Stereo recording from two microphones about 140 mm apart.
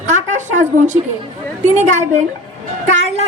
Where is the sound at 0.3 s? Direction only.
60° right (ahead or behind).